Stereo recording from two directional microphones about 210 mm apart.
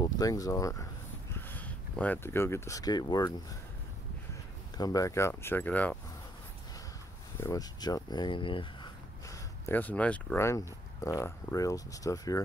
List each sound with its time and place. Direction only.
0.0 s speech: 15° left (ahead or behind)
4.7 s speech: 15° left (ahead or behind)
7.3 s speech: 15° left (ahead or behind)